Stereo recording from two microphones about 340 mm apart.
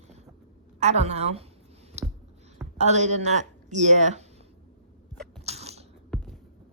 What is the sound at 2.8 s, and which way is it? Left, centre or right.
A woman's voice, centre.